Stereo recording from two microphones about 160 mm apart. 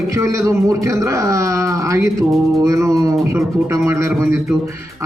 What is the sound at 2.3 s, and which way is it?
Speech, centre (ahead or behind).